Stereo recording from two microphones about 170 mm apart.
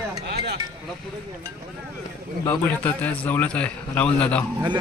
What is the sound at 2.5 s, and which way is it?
A man's voice, 10° left (ahead or behind).